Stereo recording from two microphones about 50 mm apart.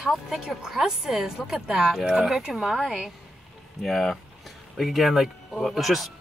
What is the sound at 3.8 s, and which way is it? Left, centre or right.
Speech, centre.